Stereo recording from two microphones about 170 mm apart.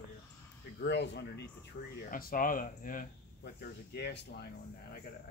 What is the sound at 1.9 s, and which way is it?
Speech, 55° left (ahead or behind).